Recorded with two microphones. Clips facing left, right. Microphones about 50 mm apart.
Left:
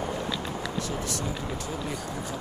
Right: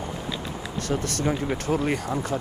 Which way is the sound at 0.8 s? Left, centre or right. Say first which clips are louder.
Right 6 dB; right.